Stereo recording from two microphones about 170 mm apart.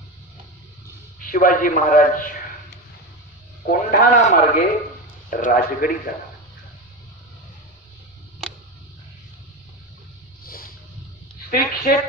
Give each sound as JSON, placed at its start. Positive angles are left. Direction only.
{"t": 1.2, "sound": "a man's voice", "side_deg": 55}
{"t": 3.6, "sound": "a man's voice", "side_deg": 55}
{"t": 10.4, "sound": "a sound", "side_deg": 60}
{"t": 11.5, "sound": "a man's voice", "side_deg": 60}